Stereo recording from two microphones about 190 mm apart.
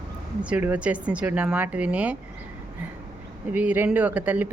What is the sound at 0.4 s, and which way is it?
Speech, 5° right (ahead or behind).